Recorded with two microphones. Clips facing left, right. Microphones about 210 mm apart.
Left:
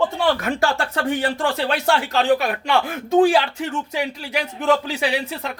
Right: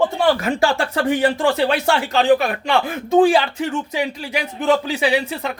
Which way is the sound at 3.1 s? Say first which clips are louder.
Right 2 dB; 5° right (ahead or behind).